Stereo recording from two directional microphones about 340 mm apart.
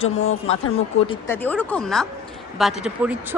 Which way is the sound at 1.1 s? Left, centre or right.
Centre.